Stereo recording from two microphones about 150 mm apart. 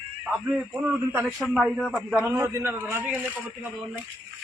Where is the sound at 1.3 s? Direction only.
Centre (ahead or behind).